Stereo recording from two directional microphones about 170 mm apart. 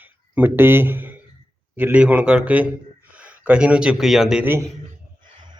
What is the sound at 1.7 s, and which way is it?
A man's voice, 10° right (ahead or behind).